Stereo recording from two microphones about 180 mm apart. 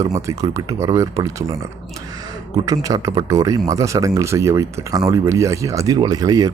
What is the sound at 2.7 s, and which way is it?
Speech, 20° right (ahead or behind).